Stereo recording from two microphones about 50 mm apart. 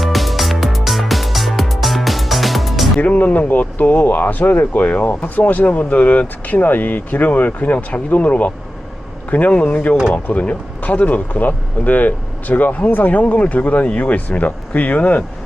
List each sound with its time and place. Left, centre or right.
0.0 s music: centre
3.0 s a man's voice: left